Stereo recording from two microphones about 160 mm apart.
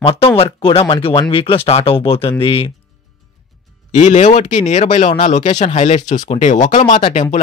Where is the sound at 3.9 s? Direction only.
50° left (ahead or behind).